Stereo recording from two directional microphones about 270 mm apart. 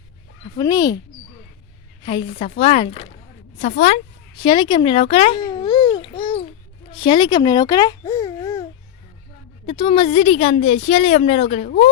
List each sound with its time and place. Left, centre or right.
0.5 s speech: centre
2.0 s a woman's voice: centre
4.4 s babbling: centre
6.9 s a child's voice: centre
9.6 s a woman's voice: centre